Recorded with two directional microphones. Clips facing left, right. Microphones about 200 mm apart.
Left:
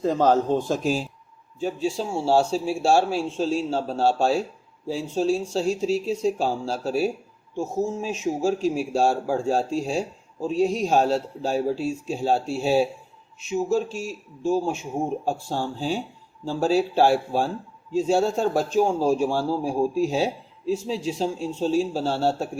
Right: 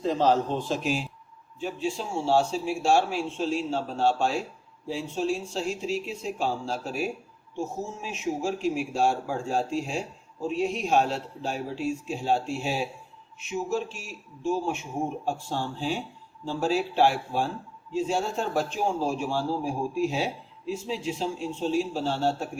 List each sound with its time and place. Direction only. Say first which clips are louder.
0.0 s a man's voice: left 3 dB; 45° left (ahead or behind)